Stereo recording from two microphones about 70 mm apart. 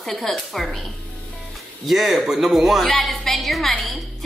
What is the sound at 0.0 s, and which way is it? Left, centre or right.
Speech, centre.